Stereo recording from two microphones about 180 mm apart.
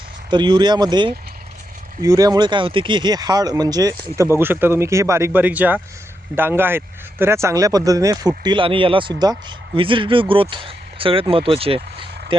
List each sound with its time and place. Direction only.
0.3 s speech: 25° right (ahead or behind)